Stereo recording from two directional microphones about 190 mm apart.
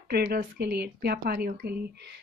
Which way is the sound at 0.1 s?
55° right (ahead or behind).